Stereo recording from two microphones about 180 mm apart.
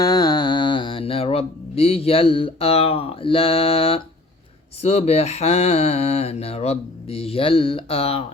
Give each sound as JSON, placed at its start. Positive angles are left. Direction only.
{"t": 0.0, "sound": "music", "side_deg": 20}
{"t": 4.8, "sound": "mantra", "side_deg": 35}